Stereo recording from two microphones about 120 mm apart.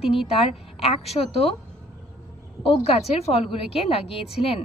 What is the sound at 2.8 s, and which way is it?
A woman's voice, 60° left (ahead or behind).